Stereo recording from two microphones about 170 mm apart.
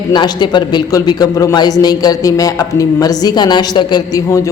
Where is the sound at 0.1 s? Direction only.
25° left (ahead or behind).